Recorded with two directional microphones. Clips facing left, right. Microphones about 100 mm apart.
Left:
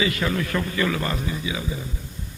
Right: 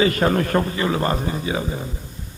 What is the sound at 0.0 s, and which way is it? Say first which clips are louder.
A man's voice: right 6 dB; 45° right (ahead or behind).